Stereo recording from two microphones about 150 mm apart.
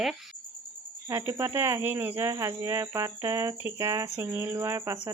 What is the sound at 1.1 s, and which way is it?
Speech, 20° right (ahead or behind).